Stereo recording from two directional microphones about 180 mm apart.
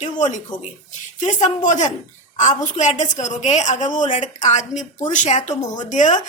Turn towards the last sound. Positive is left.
turn(degrees=40)  # may be behind; listen again after turning